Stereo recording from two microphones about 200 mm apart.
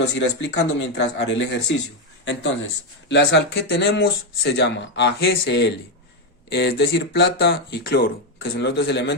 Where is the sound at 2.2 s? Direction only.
65° left (ahead or behind).